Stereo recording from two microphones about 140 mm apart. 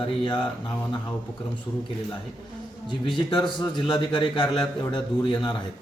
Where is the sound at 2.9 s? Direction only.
35° left (ahead or behind).